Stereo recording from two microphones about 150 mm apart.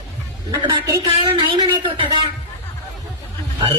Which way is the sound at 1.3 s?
35° right (ahead or behind).